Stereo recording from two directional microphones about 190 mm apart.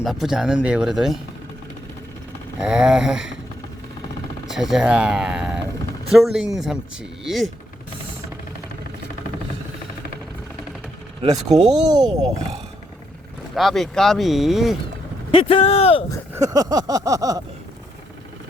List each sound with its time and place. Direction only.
0.0 s speech: centre (ahead or behind)
2.6 s speech: 5° right (ahead or behind)
4.4 s speech: centre (ahead or behind)
11.6 s a sound: 20° right (ahead or behind)
13.6 s speech: centre (ahead or behind)
15.4 s speech: 30° left (ahead or behind)
16.3 s a sound: 20° right (ahead or behind)